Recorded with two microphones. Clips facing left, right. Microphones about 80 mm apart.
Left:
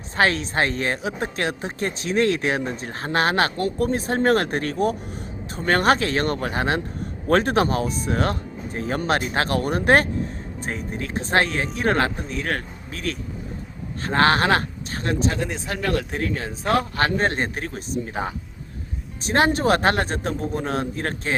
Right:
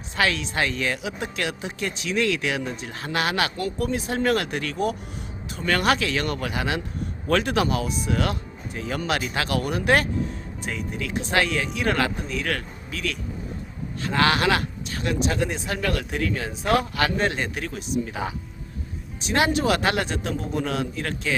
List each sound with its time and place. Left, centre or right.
0.2 s a man's voice: left
15.4 s speech: centre
15.8 s speech: left